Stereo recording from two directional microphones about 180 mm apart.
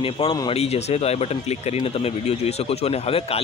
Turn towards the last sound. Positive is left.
turn(degrees=35)  # may be behind; listen again after turning